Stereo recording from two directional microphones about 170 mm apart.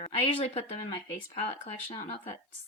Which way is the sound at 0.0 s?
35° left (ahead or behind).